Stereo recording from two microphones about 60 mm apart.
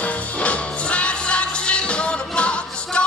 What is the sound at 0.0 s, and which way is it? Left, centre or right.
Music, left.